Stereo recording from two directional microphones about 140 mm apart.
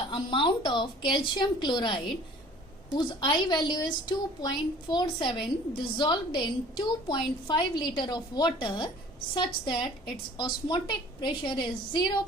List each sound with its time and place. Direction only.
0.1 s a woman's voice: 35° left (ahead or behind)